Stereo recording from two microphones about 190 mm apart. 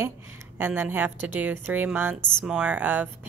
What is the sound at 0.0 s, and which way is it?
A woman's voice, 10° right (ahead or behind).